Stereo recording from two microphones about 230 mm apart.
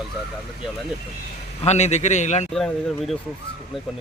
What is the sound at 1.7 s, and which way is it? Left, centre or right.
Speech, left.